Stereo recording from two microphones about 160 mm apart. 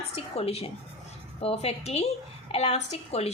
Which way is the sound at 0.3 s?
40° left (ahead or behind).